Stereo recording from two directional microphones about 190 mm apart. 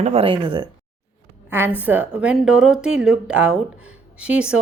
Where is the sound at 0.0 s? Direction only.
35° right (ahead or behind).